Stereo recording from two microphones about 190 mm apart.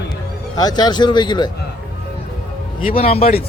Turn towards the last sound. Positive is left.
turn(degrees=30)  # may be behind; listen again after turning